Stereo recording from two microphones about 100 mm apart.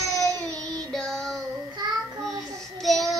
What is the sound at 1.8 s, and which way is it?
Child singing, 45° right (ahead or behind).